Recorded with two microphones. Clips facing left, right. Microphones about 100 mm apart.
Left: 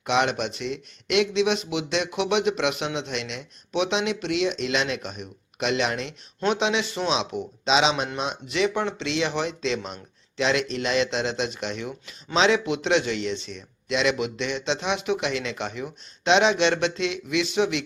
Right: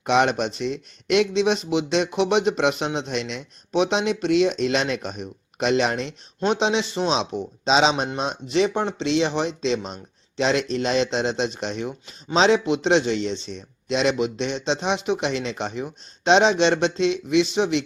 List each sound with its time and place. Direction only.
0.0 s speech: 40° right (ahead or behind)